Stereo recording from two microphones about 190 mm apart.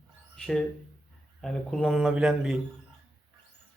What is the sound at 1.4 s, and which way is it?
A man's voice, centre (ahead or behind).